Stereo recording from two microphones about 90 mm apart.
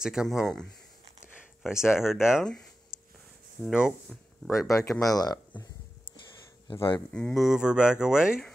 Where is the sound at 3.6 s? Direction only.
5° right (ahead or behind).